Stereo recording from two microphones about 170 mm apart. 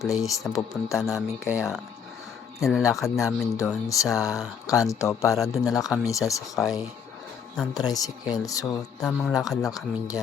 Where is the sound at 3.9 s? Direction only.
20° left (ahead or behind).